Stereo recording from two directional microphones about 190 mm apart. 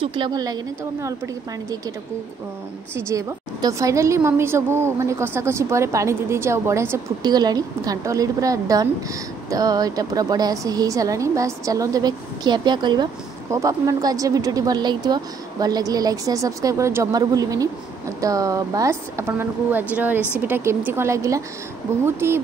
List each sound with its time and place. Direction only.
0.0 s a woman's voice: 25° right (ahead or behind)
3.0 s a woman's voice: 15° right (ahead or behind)